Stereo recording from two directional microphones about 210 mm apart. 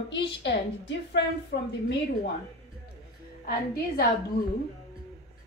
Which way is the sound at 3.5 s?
45° left (ahead or behind).